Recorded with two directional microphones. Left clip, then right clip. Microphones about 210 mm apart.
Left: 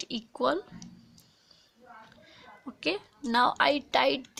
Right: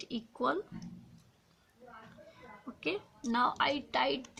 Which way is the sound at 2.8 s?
50° left (ahead or behind).